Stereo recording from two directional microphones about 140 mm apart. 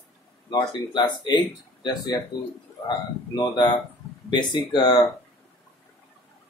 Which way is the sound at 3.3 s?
30° left (ahead or behind).